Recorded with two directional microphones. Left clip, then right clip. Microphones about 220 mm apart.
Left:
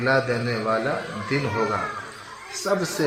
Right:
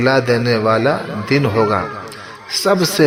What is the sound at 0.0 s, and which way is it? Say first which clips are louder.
A man's voice: right 7 dB; 45° right (ahead or behind).